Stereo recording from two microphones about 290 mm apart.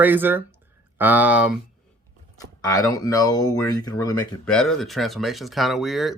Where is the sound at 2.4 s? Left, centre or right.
Centre.